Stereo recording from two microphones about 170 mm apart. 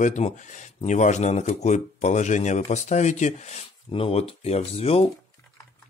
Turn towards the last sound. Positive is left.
turn(degrees=35)  # may be behind; listen again after turning